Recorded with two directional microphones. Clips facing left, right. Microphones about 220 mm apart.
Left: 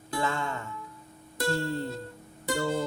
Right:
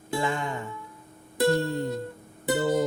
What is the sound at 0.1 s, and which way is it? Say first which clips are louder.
Music: right 2 dB; 15° right (ahead or behind).